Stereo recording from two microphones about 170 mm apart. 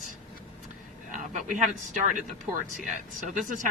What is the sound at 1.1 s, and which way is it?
Speech, 50° right (ahead or behind).